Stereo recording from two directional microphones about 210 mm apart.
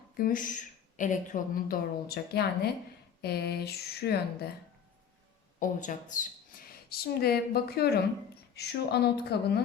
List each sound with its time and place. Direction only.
0.2 s a woman's voice: 40° left (ahead or behind)
5.5 s a woman's voice: 40° left (ahead or behind)